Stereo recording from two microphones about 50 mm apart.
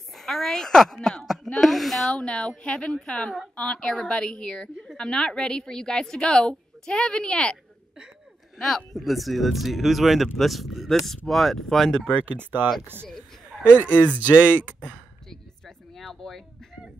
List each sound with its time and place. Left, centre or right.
0.1 s speech: centre
2.0 s a woman's voice: left
8.5 s speech: centre
13.8 s speech: left
14.3 s speech: right
15.2 s a sound: centre